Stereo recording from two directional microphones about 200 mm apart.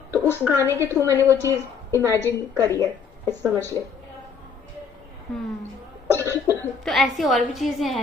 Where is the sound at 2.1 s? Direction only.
10° left (ahead or behind).